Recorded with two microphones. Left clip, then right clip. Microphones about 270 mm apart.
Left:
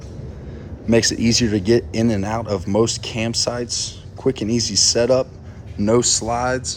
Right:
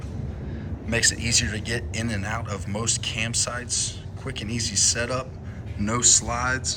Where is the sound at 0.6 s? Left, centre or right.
Left.